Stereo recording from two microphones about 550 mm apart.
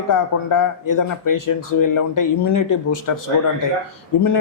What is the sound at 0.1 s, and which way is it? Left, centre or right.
Speech, left.